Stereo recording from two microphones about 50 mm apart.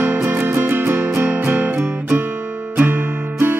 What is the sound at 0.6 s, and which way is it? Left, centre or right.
Music, right.